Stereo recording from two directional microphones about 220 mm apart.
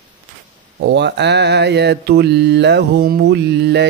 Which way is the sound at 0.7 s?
50° right (ahead or behind).